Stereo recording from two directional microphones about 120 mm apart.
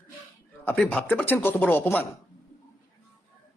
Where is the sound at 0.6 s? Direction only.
10° left (ahead or behind).